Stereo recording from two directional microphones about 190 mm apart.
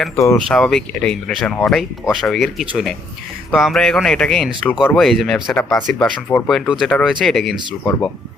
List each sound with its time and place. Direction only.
0.4 s speech: centre (ahead or behind)